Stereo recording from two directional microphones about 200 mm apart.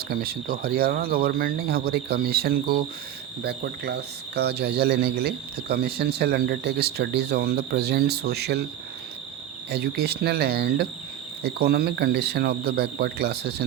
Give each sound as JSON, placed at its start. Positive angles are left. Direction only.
{"t": 0.1, "sound": "speech", "side_deg": -50}
{"t": 9.6, "sound": "speech", "side_deg": -55}